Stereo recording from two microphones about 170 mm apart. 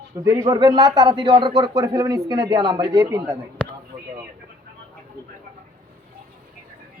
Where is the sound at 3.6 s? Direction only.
5° left (ahead or behind).